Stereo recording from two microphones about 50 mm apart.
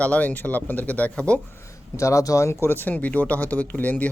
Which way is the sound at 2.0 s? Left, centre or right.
Left.